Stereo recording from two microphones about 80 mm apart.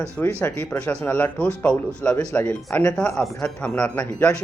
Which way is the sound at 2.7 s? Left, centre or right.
Left.